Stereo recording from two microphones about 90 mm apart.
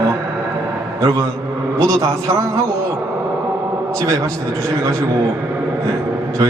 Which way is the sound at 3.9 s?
35° right (ahead or behind).